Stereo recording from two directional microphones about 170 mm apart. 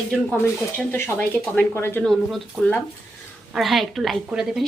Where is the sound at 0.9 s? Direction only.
15° left (ahead or behind).